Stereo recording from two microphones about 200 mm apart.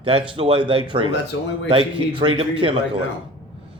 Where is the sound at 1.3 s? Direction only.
80° left.